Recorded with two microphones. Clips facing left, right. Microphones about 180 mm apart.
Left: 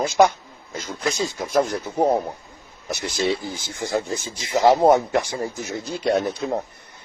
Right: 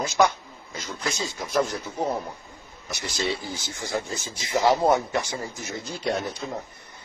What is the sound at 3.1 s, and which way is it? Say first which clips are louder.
Speech: left 5 dB; 55° left (ahead or behind).